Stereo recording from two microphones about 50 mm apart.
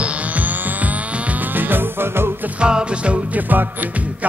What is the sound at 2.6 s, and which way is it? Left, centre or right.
Music, centre.